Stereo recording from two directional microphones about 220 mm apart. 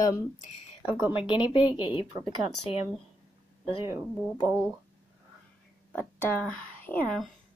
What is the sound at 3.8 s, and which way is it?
Speech, 15° right (ahead or behind).